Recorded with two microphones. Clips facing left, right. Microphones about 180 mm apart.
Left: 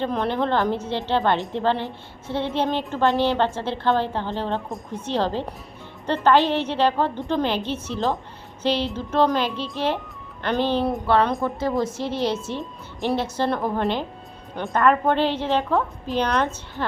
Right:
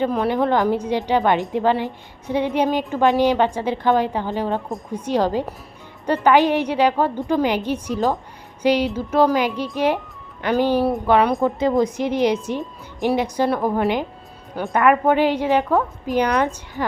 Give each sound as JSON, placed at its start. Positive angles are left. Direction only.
{"t": 0.0, "sound": "a woman's voice", "side_deg": -10}
{"t": 14.5, "sound": "a woman's voice", "side_deg": 0}
{"t": 14.8, "sound": "a woman's voice", "side_deg": -15}